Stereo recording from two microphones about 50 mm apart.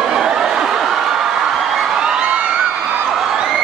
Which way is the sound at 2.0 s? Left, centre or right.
Centre.